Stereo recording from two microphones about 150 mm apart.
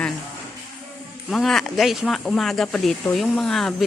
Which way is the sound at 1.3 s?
Centre (ahead or behind).